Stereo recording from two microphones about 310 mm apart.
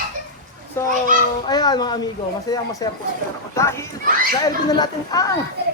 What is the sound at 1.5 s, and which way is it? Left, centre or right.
Speech, centre.